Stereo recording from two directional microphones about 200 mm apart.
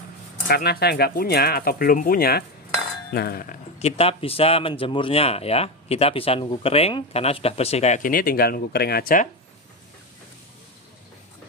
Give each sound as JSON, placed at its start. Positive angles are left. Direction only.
{"t": 0.5, "sound": "speech", "side_deg": 50}
{"t": 3.8, "sound": "speech", "side_deg": 30}